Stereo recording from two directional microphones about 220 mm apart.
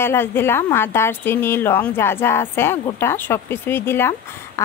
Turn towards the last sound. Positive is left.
turn(degrees=10)  # may be behind; listen again after turning